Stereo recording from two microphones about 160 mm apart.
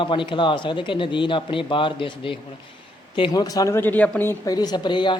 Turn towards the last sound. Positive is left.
turn(degrees=30)  # may be behind; listen again after turning